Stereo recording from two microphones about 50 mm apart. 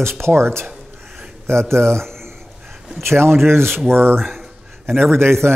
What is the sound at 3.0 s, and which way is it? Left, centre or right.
Speech, right.